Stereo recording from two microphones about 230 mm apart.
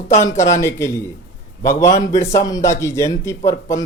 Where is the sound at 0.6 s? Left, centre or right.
Centre.